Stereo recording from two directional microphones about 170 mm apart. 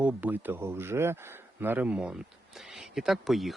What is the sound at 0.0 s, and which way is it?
Speech, 10° right (ahead or behind).